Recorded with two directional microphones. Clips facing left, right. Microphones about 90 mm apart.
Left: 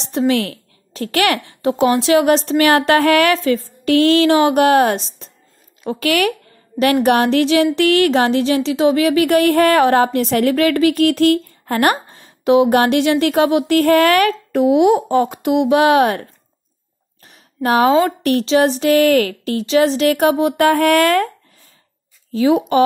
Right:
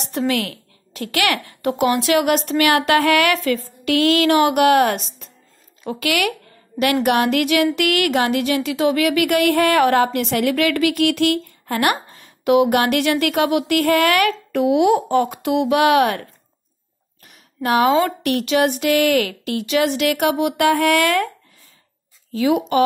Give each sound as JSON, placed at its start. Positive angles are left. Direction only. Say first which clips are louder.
{"t": 0.0, "sound": "a woman's voice", "louder": "left 4 dB", "side_deg": 20}
{"t": 1.5, "sound": "speech", "louder": "left 3 dB", "side_deg": 20}
{"t": 3.3, "sound": "speech", "louder": "left 3 dB", "side_deg": 20}
{"t": 3.8, "sound": "speech", "louder": "left 4 dB", "side_deg": 35}
{"t": 5.9, "sound": "a sound", "louder": "left 4 dB", "side_deg": 35}
{"t": 14.6, "sound": "speech", "louder": "left 3 dB", "side_deg": 25}
{"t": 17.2, "sound": "a sound", "louder": "left 4 dB", "side_deg": 35}
{"t": 22.3, "sound": "speech", "louder": "left 4 dB", "side_deg": 30}